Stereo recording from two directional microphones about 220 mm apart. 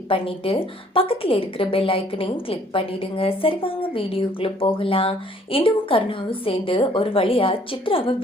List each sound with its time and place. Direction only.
0.1 s a woman's voice: 25° left (ahead or behind)